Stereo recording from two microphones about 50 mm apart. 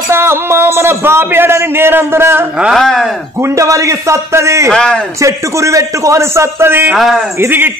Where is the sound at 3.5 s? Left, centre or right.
Right.